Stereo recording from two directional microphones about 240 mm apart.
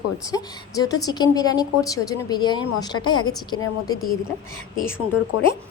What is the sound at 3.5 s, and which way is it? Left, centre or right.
Speech, left.